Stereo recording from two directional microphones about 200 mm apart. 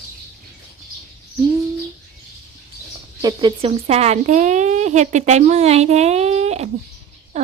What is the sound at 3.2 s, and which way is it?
Speech, 25° right (ahead or behind).